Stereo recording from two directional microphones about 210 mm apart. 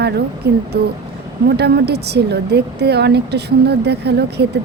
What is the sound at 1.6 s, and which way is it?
A woman's voice, 50° right (ahead or behind).